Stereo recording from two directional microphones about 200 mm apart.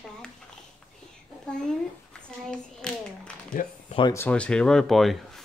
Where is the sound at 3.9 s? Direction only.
25° left (ahead or behind).